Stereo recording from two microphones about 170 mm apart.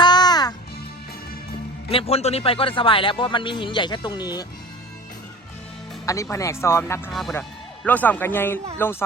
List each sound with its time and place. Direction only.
0.0 s music: 25° left (ahead or behind)
1.9 s a man's voice: 35° left (ahead or behind)
6.3 s speech: 15° left (ahead or behind)
7.1 s speech: centre (ahead or behind)